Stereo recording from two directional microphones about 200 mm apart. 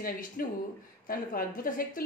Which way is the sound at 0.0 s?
45° left (ahead or behind).